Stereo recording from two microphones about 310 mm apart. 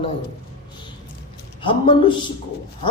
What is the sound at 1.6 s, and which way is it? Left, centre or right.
Speech, centre.